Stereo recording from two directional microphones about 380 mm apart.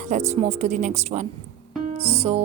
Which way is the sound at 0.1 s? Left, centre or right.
Centre.